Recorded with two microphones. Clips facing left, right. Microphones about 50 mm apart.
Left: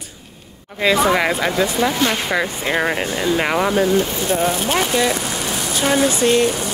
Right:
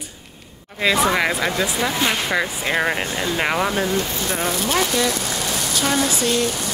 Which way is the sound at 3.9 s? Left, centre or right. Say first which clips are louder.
Left 5 dB; left.